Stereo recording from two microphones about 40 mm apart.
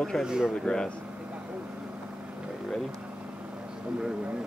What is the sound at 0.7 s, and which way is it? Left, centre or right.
Speech, centre.